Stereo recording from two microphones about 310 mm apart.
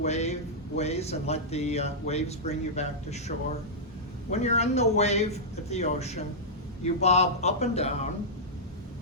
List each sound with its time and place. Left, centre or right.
0.0 s speech: left